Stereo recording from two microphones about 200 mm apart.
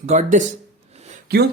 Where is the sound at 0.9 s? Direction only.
35° right (ahead or behind).